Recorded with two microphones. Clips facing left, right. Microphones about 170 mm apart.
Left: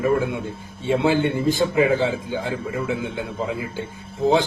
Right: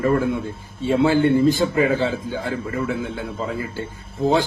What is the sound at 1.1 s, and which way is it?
A man's voice, 15° left (ahead or behind).